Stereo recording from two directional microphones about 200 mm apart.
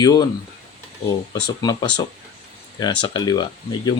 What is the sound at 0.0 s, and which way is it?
Speech, 20° left (ahead or behind).